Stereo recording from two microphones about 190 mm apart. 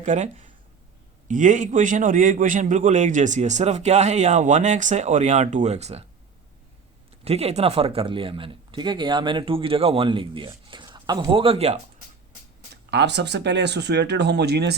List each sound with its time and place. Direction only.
0.0 s a man's voice: 40° right (ahead or behind)
7.3 s speech: 35° right (ahead or behind)
12.7 s speech: 60° right (ahead or behind)